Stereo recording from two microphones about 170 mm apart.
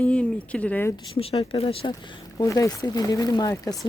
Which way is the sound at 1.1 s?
35° left (ahead or behind).